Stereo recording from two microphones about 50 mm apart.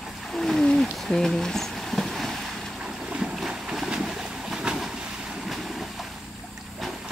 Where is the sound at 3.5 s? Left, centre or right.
Centre.